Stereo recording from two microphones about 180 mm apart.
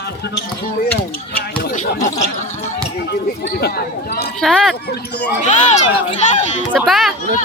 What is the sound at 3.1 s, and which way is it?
Speech, 65° left (ahead or behind).